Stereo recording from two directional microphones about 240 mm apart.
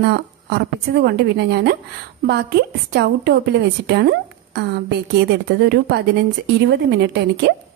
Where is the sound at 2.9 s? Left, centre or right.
Right.